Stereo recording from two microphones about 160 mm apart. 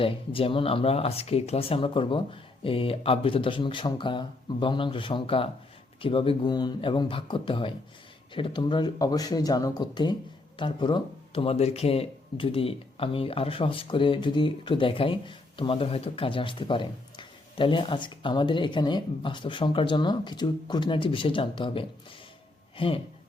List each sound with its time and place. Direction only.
0.0 s speech: 35° left (ahead or behind)